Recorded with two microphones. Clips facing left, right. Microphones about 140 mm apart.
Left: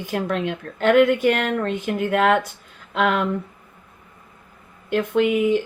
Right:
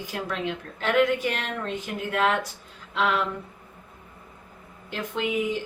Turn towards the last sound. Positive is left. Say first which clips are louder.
# left 9 dB
turn(degrees=55)  # may be behind; listen again after turning